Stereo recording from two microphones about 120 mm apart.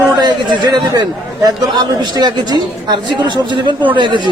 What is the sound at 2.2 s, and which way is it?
A woman's voice, 35° right (ahead or behind).